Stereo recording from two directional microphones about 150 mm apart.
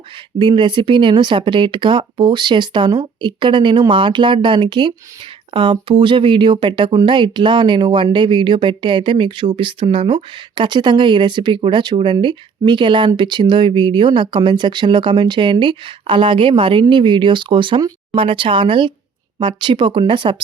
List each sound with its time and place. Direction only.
0.3 s speech: 30° right (ahead or behind)